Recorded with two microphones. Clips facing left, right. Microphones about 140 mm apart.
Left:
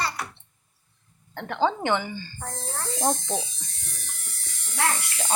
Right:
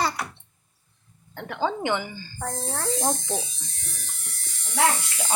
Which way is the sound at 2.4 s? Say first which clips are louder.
Right 4 dB; 70° right (ahead or behind).